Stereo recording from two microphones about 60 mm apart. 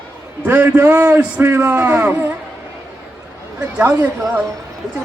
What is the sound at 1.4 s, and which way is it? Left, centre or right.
Speech, right.